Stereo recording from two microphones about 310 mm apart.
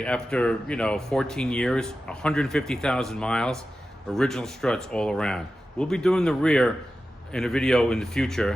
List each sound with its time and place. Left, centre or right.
0.0 s speech: centre